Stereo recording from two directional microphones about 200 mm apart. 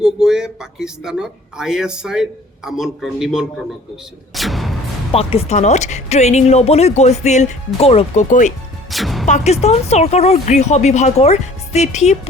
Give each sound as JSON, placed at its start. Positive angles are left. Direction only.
{"t": 0.0, "sound": "a man's voice", "side_deg": 0}
{"t": 4.4, "sound": "artillery fire", "side_deg": 0}
{"t": 5.1, "sound": "speech", "side_deg": 30}
{"t": 8.9, "sound": "music", "side_deg": 0}
{"t": 9.2, "sound": "speech", "side_deg": 35}